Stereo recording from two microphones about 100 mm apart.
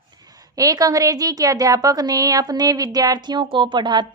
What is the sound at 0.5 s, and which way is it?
A woman's voice, 35° right (ahead or behind).